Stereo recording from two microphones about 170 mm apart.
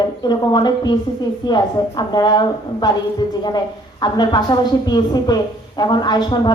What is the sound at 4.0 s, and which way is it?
A woman's voice, 25° left (ahead or behind).